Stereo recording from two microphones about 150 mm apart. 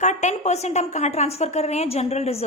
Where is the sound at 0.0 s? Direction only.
50° left (ahead or behind).